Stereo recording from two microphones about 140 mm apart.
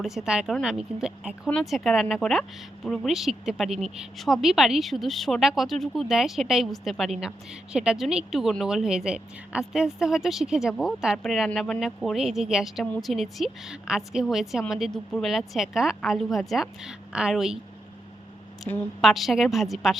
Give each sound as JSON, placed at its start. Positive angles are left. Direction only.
{"t": 0.0, "sound": "speech", "side_deg": -5}
{"t": 18.7, "sound": "a woman's voice", "side_deg": 20}
{"t": 19.0, "sound": "speech", "side_deg": 0}